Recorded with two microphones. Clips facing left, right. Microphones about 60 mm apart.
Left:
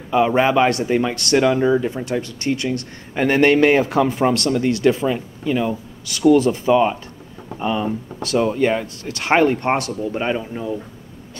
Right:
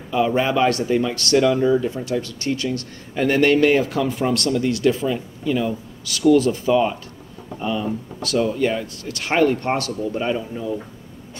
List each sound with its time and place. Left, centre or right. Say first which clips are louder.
0.1 s speech: left 3 dB; left